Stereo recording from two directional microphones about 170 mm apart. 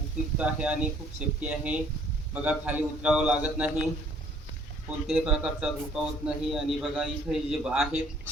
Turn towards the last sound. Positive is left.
turn(degrees=-5)  # may be behind; listen again after turning